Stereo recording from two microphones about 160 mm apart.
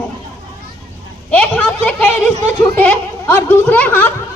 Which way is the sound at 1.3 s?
10° left (ahead or behind).